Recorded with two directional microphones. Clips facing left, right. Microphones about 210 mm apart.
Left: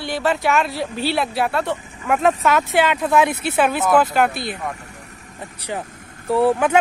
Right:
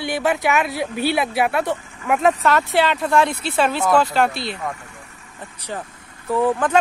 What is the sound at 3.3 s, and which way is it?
Speech, 60° left (ahead or behind).